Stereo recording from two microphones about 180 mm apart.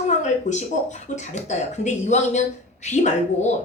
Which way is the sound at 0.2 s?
40° left (ahead or behind).